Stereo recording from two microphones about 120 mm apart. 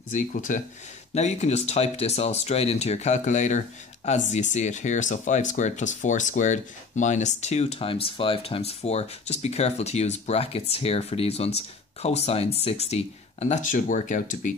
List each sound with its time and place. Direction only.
0.1 s speech: 90° left
1.1 s speech: 70° left (ahead or behind); by 14.5 s 90° left